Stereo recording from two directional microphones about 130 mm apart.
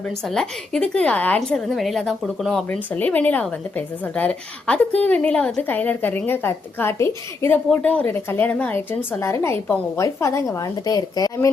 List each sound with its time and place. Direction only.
0.0 s a woman's voice: 5° left (ahead or behind)
2.6 s a woman's voice: 15° left (ahead or behind)